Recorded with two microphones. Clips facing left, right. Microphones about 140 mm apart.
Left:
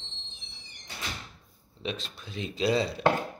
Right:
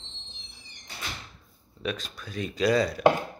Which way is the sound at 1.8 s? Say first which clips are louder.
Right 3 dB; 25° left (ahead or behind).